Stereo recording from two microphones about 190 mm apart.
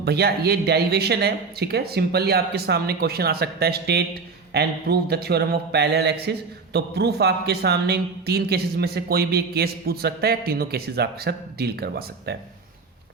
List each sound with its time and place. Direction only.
0.0 s speech: 60° right (ahead or behind)